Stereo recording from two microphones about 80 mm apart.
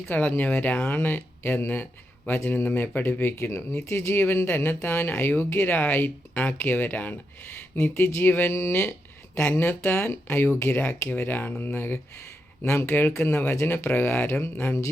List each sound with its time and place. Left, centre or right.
0.1 s speech: left
8.7 s speech: centre
10.1 s speech: left